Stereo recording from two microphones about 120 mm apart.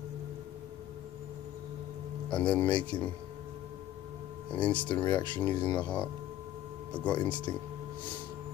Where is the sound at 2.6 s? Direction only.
40° left (ahead or behind).